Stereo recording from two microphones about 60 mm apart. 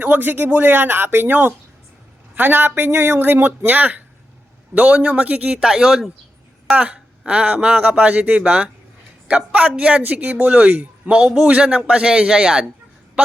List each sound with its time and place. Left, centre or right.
0.0 s speech: right; by 6.1 s centre
6.7 s a woman's voice: right
10.1 s speech: right; by 12.6 s centre